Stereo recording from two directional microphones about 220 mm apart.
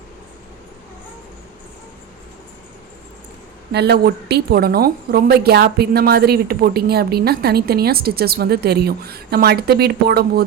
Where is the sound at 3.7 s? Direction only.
50° right (ahead or behind).